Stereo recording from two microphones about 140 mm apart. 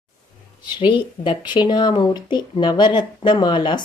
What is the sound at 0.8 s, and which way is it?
Speech, 35° left (ahead or behind).